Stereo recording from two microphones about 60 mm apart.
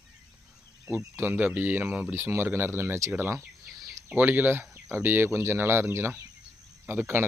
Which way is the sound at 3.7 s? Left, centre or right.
Centre.